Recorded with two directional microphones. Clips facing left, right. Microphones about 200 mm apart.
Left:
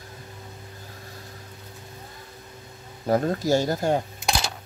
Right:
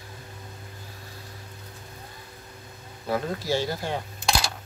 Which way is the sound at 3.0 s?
45° left (ahead or behind).